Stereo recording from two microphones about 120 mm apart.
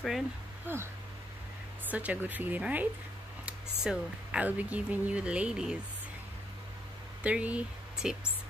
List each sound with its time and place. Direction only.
0.7 s speech: 15° right (ahead or behind)
1.9 s speech: 15° right (ahead or behind)
7.2 s speech: 10° right (ahead or behind)